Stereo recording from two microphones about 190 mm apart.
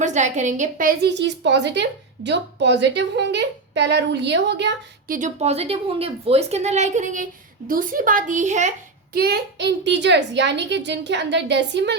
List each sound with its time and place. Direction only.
0.0 s a woman's voice: 40° right (ahead or behind)
1.0 s speech: 65° right (ahead or behind)
5.0 s a woman's voice: 45° right (ahead or behind)
9.1 s a woman's voice: 55° right (ahead or behind)